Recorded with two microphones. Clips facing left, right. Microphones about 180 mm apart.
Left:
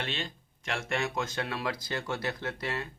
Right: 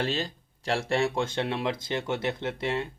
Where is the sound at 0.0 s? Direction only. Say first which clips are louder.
Right 7 dB; 35° right (ahead or behind).